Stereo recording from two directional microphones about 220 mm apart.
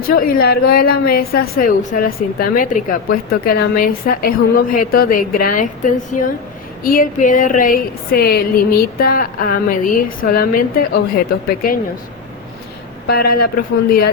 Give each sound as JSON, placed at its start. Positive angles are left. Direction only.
{"t": 0.1, "sound": "a woman's voice", "side_deg": 45}
{"t": 13.1, "sound": "a woman's voice", "side_deg": 45}